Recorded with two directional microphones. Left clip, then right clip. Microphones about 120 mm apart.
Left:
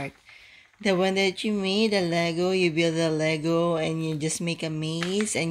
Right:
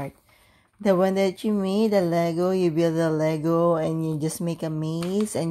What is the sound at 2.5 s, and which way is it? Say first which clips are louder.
Speech: right 1 dB; 50° right (ahead or behind).